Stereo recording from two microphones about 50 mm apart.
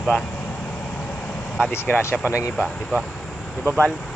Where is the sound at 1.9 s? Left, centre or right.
Left.